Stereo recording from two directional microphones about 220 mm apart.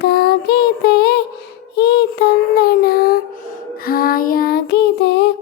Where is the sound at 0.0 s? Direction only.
45° left (ahead or behind).